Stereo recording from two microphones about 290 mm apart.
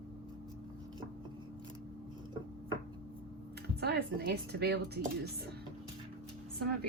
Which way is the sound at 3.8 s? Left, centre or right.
Right.